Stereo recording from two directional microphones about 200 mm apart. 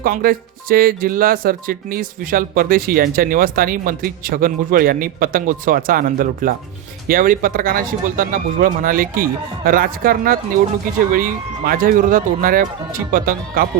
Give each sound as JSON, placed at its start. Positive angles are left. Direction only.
{"t": 0.0, "sound": "speech", "side_deg": -45}